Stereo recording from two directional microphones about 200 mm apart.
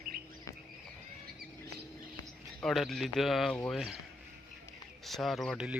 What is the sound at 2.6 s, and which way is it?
Speech, centre (ahead or behind).